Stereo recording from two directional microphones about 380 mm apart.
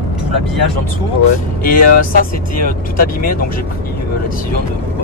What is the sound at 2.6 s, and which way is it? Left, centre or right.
Mantra, left.